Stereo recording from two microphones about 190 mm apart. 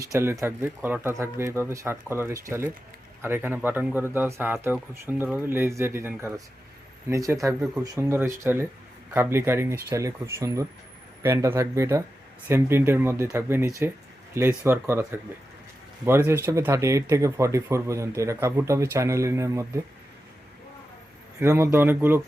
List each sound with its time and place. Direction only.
0.1 s speech: 15° right (ahead or behind)
16.0 s speech: 10° right (ahead or behind)
21.4 s speech: 15° right (ahead or behind)